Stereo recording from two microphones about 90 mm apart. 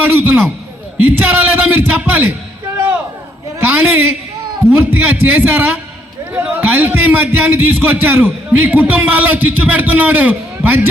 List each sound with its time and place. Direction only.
0.0 s a man's voice: 25° right (ahead or behind)
3.6 s a man's voice: 20° right (ahead or behind)